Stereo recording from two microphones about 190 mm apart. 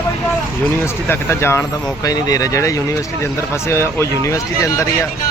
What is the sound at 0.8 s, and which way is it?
Speech, 10° left (ahead or behind).